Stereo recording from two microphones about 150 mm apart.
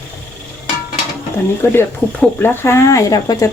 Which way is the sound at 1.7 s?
15° left (ahead or behind).